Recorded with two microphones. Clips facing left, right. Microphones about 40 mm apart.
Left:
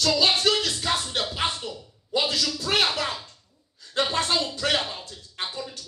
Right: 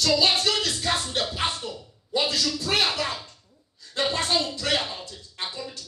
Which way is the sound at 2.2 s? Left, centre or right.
Left.